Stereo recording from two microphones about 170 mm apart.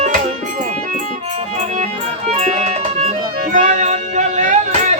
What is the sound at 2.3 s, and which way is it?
Music, 40° right (ahead or behind).